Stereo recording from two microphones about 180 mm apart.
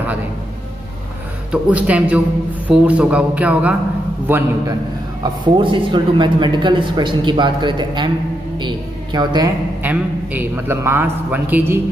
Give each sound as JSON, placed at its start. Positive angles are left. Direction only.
{"t": 1.5, "sound": "a man's voice", "side_deg": -10}
{"t": 5.2, "sound": "speech", "side_deg": -25}
{"t": 8.5, "sound": "a sound", "side_deg": -25}
{"t": 9.8, "sound": "a man's voice", "side_deg": -10}